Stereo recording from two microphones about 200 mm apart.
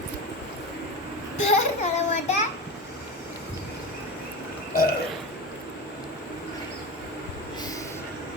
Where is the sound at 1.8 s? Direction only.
35° left (ahead or behind).